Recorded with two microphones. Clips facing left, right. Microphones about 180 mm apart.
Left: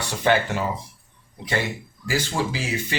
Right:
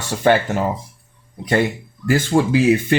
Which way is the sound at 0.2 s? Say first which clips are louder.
Right 5 dB; 50° right (ahead or behind).